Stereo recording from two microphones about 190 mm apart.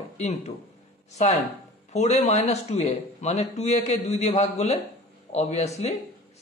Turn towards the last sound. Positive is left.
turn(degrees=35)  # may be behind; listen again after turning